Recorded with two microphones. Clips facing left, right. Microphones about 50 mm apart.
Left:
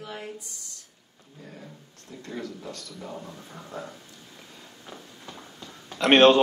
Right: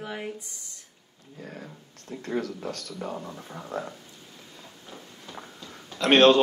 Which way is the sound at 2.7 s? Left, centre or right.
Right.